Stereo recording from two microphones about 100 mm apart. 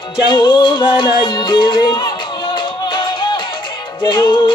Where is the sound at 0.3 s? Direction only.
55° left (ahead or behind).